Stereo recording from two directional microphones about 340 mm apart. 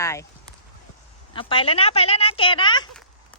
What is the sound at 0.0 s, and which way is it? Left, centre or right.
Speech, centre.